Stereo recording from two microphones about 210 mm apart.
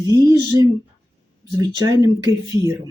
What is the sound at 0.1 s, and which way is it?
Speech, 15° right (ahead or behind).